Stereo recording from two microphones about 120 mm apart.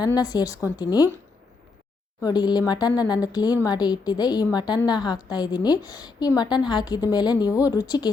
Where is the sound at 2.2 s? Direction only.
35° left (ahead or behind).